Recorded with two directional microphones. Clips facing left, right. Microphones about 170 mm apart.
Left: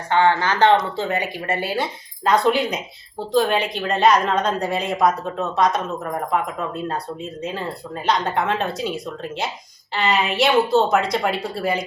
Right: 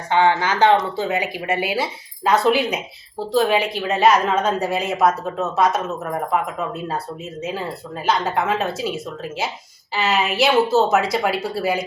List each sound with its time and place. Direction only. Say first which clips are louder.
0.1 s speech: even; 15° right (ahead or behind)